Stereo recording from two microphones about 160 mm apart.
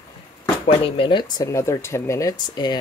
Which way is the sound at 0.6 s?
35° left (ahead or behind).